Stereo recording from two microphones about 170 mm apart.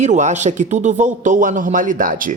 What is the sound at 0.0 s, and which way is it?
Speech, 45° right (ahead or behind).